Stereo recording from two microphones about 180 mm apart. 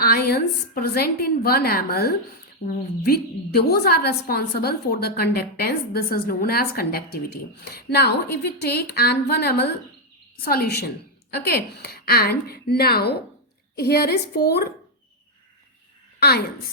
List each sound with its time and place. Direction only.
0.0 s a woman's voice: 60° left (ahead or behind)